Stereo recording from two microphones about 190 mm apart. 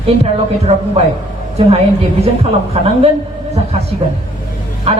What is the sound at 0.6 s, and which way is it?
Speech, 35° right (ahead or behind).